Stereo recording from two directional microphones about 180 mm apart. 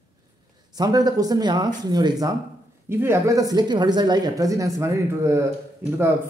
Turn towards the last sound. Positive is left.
turn(degrees=-10)  # may be behind; listen again after turning